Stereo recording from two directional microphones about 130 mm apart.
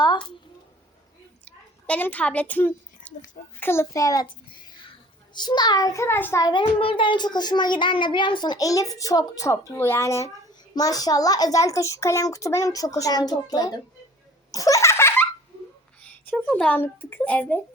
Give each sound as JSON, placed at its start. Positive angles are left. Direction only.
{"t": 0.0, "sound": "a sound", "side_deg": 35}
{"t": 1.5, "sound": "a woman's voice", "side_deg": 10}
{"t": 6.4, "sound": "a child's voice", "side_deg": 35}
{"t": 14.5, "sound": "laughter", "side_deg": 25}
{"t": 16.3, "sound": "speech", "side_deg": 10}